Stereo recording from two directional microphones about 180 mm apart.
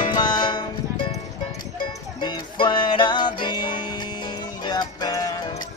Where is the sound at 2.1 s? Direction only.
25° left (ahead or behind).